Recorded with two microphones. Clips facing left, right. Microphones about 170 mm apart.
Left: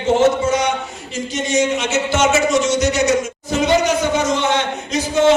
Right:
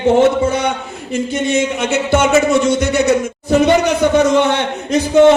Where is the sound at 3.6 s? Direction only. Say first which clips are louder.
Right 1 dB; 60° right (ahead or behind).